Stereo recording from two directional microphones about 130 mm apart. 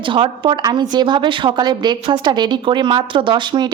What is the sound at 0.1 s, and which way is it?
Speech, 40° right (ahead or behind).